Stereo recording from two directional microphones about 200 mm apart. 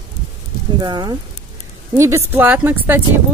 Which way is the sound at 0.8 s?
20° right (ahead or behind).